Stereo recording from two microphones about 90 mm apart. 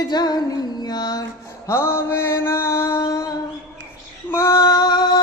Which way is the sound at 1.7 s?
30° left (ahead or behind).